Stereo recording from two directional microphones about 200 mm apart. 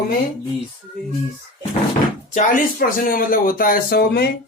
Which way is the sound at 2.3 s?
45° left (ahead or behind).